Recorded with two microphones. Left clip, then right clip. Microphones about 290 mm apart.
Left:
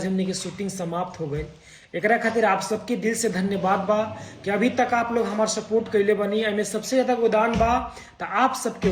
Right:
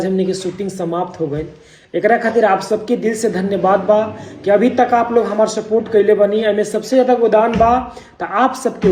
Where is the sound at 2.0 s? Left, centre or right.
Centre.